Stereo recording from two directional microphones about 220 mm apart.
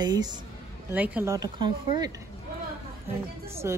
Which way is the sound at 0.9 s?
5° right (ahead or behind).